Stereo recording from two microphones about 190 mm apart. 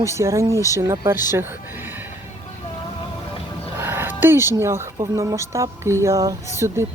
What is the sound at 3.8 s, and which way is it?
Speech, 10° right (ahead or behind).